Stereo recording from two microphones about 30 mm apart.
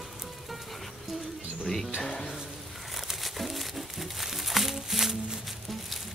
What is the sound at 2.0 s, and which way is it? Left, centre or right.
Speech, left.